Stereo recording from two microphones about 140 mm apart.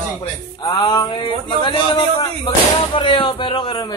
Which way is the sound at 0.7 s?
30° left (ahead or behind).